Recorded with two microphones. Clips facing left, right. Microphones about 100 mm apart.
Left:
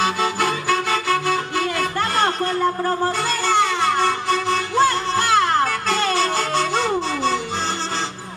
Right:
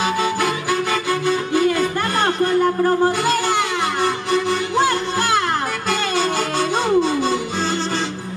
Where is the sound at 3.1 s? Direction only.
15° right (ahead or behind).